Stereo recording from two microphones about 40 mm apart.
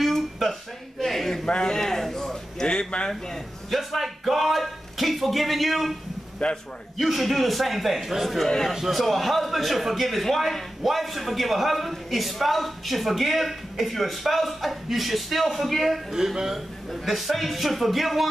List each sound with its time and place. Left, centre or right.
0.0 s a sound: centre
1.4 s a man's voice: centre
3.7 s a man's voice: centre
6.4 s a man's voice: centre
7.0 s a man's voice: centre
8.5 s a man's voice: centre
8.7 s a man's voice: centre